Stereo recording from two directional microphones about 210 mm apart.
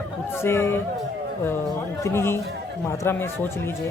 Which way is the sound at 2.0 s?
10° left (ahead or behind).